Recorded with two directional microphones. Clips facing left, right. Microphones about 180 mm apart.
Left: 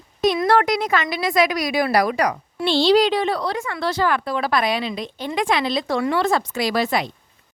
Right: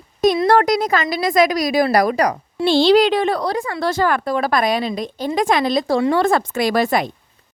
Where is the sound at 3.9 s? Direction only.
45° right (ahead or behind).